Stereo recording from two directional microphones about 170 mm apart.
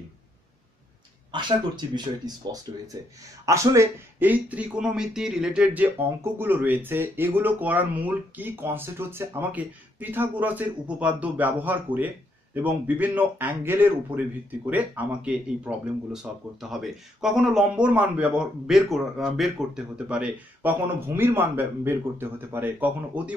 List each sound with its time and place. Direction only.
1.3 s a man's voice: 25° right (ahead or behind); by 23.3 s 10° right (ahead or behind)